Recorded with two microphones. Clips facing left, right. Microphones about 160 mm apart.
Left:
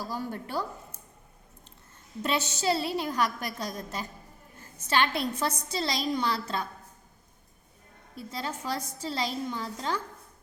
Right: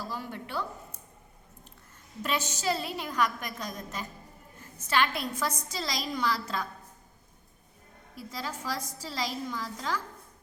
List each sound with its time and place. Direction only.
0.1 s a woman's voice: 40° left (ahead or behind)
2.2 s a woman's voice: 30° left (ahead or behind)
8.3 s a woman's voice: 25° left (ahead or behind)